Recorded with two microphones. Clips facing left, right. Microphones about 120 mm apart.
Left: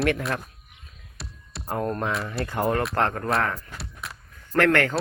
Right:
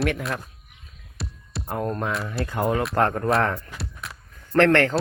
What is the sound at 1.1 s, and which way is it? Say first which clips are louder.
Music: right 6 dB; centre (ahead or behind).